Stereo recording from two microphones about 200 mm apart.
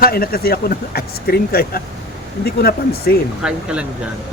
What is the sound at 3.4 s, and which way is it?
Speech, 5° right (ahead or behind).